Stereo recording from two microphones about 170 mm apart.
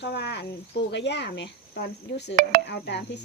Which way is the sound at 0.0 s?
75° left (ahead or behind).